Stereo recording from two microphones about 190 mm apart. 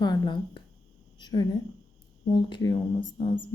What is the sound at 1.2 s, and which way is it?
Speech, 20° left (ahead or behind).